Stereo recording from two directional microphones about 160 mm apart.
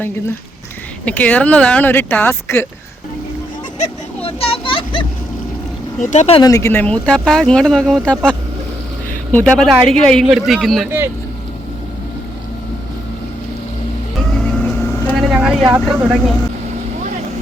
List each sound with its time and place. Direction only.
1.0 s speech: 10° left (ahead or behind)
3.8 s vehicle: 40° left (ahead or behind)
6.0 s speech: 50° left (ahead or behind)
6.4 s speech: 20° left (ahead or behind); by 10.8 s centre (ahead or behind)
14.3 s vehicle: 5° left (ahead or behind)
15.2 s vehicle: 5° right (ahead or behind)
15.7 s speech: 5° right (ahead or behind)